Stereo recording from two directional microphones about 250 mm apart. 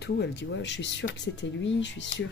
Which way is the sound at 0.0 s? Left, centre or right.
Left.